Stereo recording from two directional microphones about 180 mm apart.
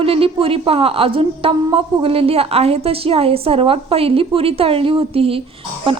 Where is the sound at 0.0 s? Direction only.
30° right (ahead or behind).